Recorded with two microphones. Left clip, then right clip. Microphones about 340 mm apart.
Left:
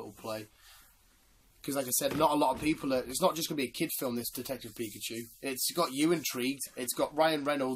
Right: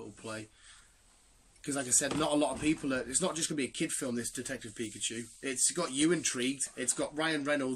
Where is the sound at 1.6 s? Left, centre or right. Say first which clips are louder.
Left 1 dB; centre.